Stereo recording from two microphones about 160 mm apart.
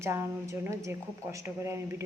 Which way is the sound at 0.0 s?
15° right (ahead or behind).